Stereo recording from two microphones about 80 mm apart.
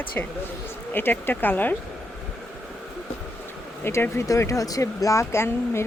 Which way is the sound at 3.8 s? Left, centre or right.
Left.